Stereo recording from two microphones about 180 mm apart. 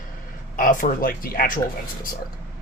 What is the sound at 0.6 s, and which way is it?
Speech, 50° left (ahead or behind).